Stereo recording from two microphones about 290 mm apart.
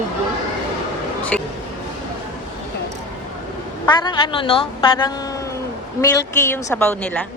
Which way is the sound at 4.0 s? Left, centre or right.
Centre.